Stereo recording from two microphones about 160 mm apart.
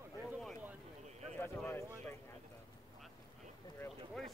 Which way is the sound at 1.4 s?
15° left (ahead or behind).